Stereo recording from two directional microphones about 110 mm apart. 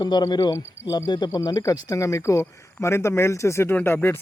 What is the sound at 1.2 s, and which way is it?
Speech, 30° left (ahead or behind).